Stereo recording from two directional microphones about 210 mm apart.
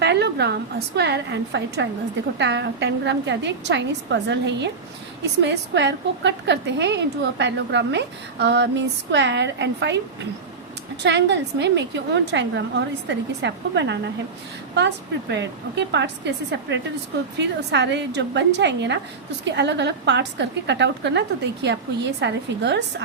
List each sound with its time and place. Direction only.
0.0 s a woman's voice: 55° right (ahead or behind)
11.0 s a woman's voice: 55° right (ahead or behind)